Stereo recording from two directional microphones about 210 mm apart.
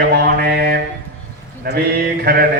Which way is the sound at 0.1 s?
45° right (ahead or behind).